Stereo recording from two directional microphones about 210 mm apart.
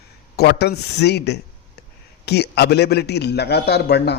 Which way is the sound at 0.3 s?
50° left (ahead or behind).